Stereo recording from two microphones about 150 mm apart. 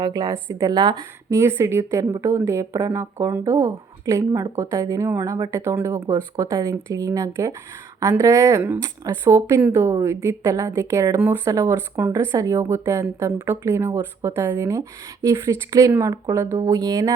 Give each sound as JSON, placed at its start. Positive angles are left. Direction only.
{"t": 0.0, "sound": "speech", "side_deg": -25}